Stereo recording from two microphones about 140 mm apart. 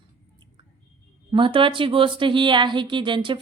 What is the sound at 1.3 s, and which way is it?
Speech, 40° right (ahead or behind).